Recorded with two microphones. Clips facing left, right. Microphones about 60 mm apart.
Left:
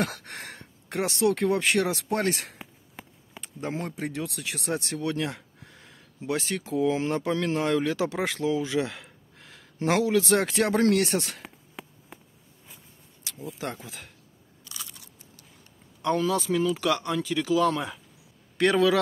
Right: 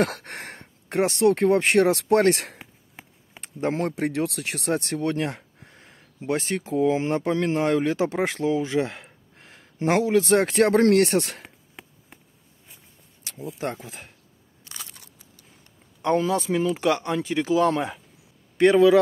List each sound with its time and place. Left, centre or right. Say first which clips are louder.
0.0 s speech: right 5 dB; right
11.4 s a sound: left 3 dB; centre
13.8 s speech: right 2 dB; right
14.7 s crunch: right 1 dB; right
16.0 s speech: right 3 dB; right